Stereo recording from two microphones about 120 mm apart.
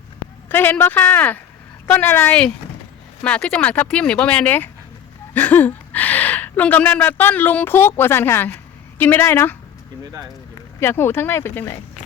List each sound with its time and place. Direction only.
0.4 s speech: 15° left (ahead or behind)
10.8 s speech: 20° left (ahead or behind)